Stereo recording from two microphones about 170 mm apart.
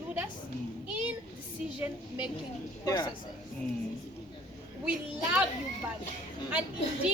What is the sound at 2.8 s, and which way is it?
Speech, 25° left (ahead or behind).